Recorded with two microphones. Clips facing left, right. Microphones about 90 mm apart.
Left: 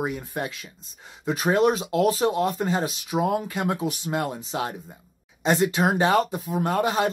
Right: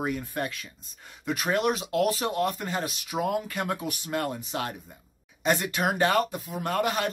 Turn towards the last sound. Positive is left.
turn(degrees=30)  # may be behind; listen again after turning